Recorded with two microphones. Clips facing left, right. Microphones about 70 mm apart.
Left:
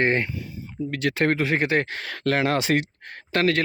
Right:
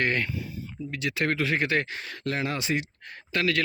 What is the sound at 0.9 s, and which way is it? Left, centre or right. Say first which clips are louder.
Speech: left 5 dB; left.